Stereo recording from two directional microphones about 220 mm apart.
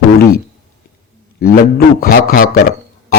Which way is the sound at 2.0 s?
40° left (ahead or behind).